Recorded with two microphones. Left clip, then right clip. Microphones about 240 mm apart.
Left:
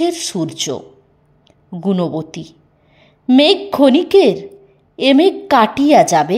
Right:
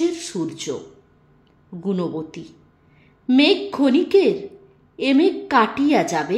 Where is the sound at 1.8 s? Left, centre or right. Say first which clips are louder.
Left 6 dB; left.